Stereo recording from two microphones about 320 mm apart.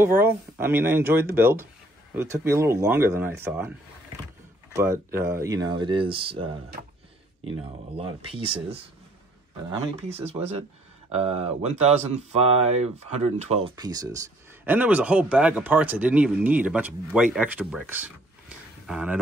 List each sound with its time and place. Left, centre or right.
0.0 s speech: centre
4.7 s speech: centre
10.2 s speech: centre